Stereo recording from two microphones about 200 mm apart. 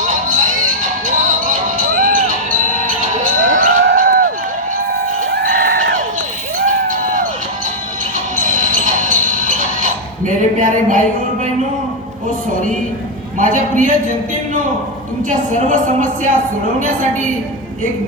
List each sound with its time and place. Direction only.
0.3 s music: 40° right (ahead or behind)
5.3 s a sound: 50° right (ahead or behind)
6.7 s music: 40° right (ahead or behind)
8.4 s music: 40° right (ahead or behind)
13.4 s a woman's voice: 40° right (ahead or behind)
15.3 s a woman's voice: 40° right (ahead or behind)